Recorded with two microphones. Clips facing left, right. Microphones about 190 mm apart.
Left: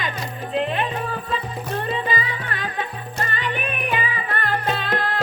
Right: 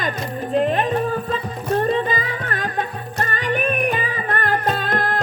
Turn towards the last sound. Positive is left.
turn(degrees=-45)  # may be behind; listen again after turning